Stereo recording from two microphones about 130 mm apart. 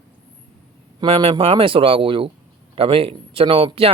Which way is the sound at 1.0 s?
45° right (ahead or behind).